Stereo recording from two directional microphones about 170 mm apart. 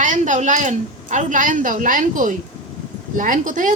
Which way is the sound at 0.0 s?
45° right (ahead or behind).